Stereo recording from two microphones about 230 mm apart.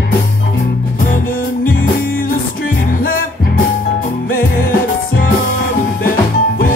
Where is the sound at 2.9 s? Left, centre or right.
Left.